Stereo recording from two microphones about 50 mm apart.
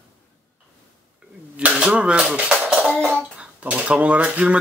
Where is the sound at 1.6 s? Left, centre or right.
Right.